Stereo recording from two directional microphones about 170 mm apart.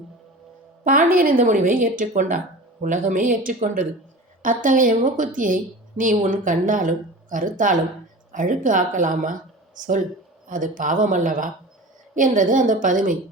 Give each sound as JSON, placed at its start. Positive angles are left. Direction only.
{"t": 0.9, "sound": "a woman's voice", "side_deg": -55}